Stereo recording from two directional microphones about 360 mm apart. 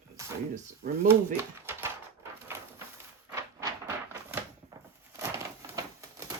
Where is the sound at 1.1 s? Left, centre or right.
Centre.